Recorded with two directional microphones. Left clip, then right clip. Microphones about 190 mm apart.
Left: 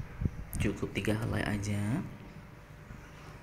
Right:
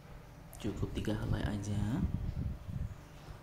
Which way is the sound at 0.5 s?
60° right (ahead or behind).